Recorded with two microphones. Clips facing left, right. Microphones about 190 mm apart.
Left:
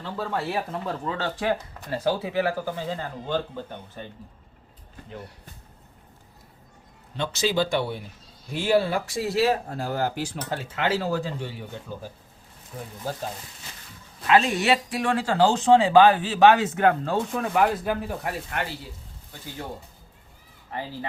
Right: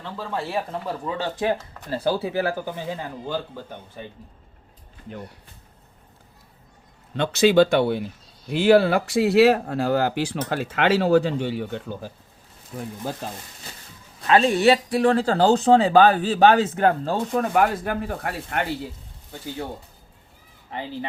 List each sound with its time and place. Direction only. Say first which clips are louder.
0.0 s speech: left 1 dB; centre (ahead or behind)
1.0 s speech: right 2 dB; 20° right (ahead or behind)
2.7 s speech: even; 15° right (ahead or behind)
7.2 s speech: right 8 dB; 60° right (ahead or behind)
14.3 s speech: right 4 dB; 30° right (ahead or behind)
17.5 s speech: left 2 dB; 50° right (ahead or behind)